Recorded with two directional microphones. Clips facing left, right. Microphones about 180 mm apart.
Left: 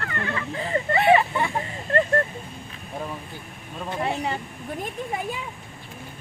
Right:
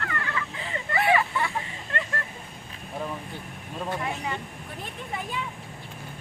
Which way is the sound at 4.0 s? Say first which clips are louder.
Left 5 dB; 35° left (ahead or behind).